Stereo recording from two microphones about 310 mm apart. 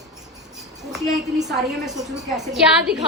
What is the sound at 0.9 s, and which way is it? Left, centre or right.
A woman's voice, centre.